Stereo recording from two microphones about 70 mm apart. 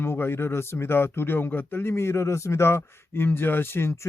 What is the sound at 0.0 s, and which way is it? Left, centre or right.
Speech, left.